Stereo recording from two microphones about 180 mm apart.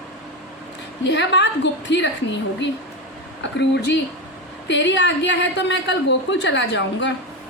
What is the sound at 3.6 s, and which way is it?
Speech, 75° left (ahead or behind).